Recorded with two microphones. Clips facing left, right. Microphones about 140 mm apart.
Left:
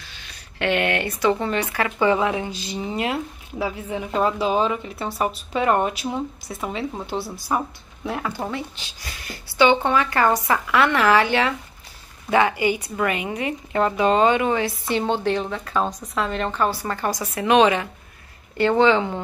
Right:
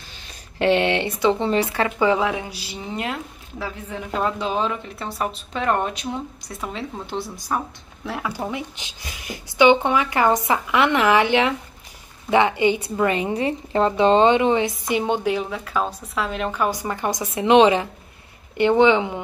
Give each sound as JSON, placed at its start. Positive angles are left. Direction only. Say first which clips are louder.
{"t": 0.6, "sound": "a woman's voice", "louder": "right 3 dB", "side_deg": -30}
{"t": 1.9, "sound": "speech", "louder": "even", "side_deg": -10}
{"t": 8.3, "sound": "a woman's voice", "louder": "even", "side_deg": -15}